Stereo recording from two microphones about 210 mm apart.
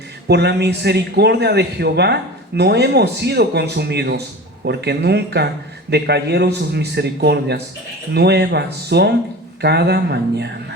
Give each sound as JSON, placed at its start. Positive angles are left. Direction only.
{"t": 0.3, "sound": "a man's voice", "side_deg": -50}